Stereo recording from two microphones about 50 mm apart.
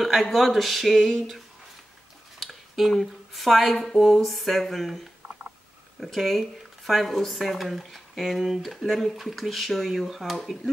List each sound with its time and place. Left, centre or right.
0.0 s speech: centre
2.4 s speech: centre